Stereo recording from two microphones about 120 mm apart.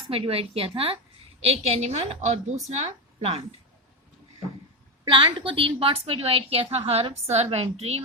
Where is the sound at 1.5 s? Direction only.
65° right (ahead or behind).